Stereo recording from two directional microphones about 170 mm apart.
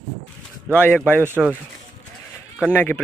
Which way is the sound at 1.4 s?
Centre (ahead or behind).